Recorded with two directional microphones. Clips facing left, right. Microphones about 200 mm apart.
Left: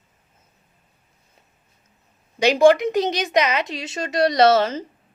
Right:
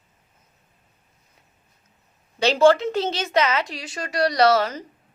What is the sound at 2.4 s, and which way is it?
A woman's voice, 15° left (ahead or behind).